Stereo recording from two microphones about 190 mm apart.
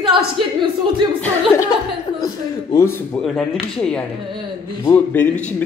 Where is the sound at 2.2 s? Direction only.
15° left (ahead or behind).